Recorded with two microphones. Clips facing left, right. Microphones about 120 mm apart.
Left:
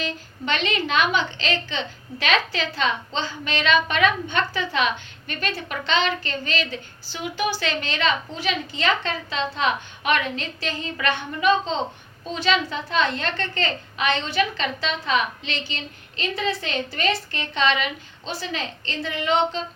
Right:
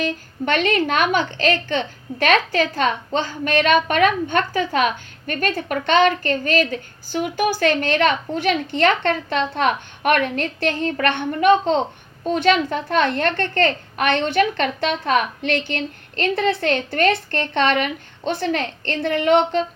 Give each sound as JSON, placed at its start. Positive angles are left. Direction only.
{"t": 0.0, "sound": "a woman's voice", "side_deg": -50}